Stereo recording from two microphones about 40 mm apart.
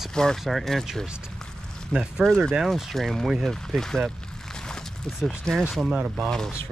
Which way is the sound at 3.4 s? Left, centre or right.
Centre.